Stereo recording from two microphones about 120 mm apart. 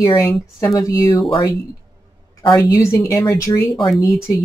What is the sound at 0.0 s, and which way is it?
Speech, 25° left (ahead or behind).